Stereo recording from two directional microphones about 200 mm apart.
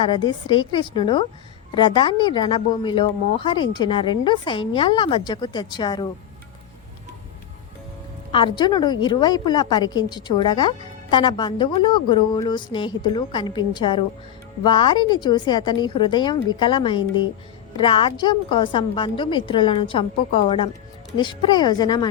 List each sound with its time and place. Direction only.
0.0 s a woman's voice: 20° left (ahead or behind)
8.3 s a woman's voice: 25° left (ahead or behind)